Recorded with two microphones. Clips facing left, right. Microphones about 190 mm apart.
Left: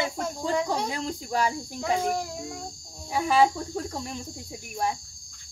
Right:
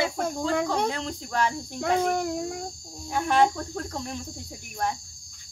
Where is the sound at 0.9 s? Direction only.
10° left (ahead or behind).